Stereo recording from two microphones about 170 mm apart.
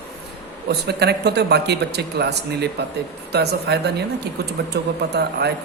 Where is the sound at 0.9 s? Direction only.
75° right (ahead or behind).